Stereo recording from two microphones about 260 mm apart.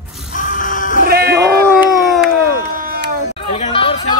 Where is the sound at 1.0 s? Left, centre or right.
Right.